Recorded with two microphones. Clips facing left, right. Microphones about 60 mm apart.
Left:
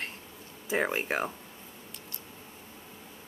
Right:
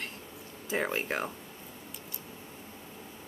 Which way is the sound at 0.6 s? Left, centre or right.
Centre.